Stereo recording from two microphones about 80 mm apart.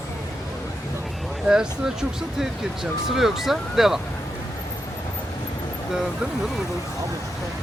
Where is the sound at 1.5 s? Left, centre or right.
Centre.